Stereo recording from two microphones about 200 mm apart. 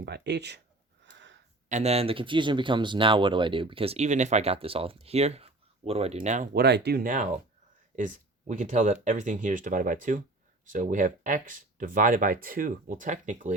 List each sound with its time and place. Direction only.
0.0 s speech: 55° right (ahead or behind)
1.1 s a sound: 65° right (ahead or behind)
1.7 s speech: 30° right (ahead or behind)
6.5 s speech: 55° right (ahead or behind); by 13.5 s 40° right (ahead or behind)